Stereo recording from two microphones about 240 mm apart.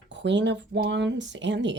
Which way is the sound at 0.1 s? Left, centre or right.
Right.